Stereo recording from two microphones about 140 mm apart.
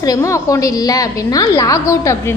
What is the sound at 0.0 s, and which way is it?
A woman's voice, 25° left (ahead or behind).